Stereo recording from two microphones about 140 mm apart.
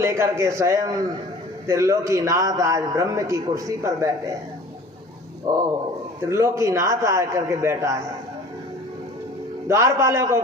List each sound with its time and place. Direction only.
0.0 s a man's voice: 20° right (ahead or behind)
5.5 s a man's voice: 25° right (ahead or behind)
9.6 s a man's voice: 20° right (ahead or behind)